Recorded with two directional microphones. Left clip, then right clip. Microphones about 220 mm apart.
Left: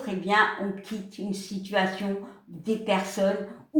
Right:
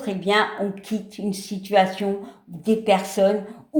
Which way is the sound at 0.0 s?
45° right (ahead or behind).